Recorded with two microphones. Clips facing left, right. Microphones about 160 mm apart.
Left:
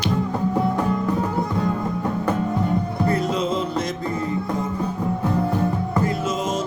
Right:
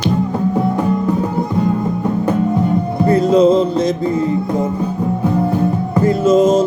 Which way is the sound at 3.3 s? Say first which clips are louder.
Right 12 dB; 40° right (ahead or behind).